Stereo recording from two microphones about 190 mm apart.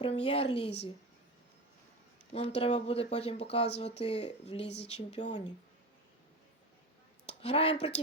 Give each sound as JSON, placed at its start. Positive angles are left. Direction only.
{"t": 0.0, "sound": "a woman's voice", "side_deg": 30}
{"t": 2.3, "sound": "speech", "side_deg": 30}
{"t": 7.3, "sound": "speech", "side_deg": 30}